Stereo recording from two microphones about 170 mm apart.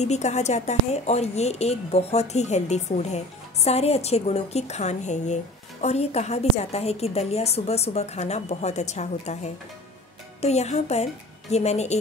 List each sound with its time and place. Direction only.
0.0 s a woman's voice: 40° left (ahead or behind)